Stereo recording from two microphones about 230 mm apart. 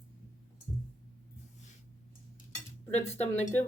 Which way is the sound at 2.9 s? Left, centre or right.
Left.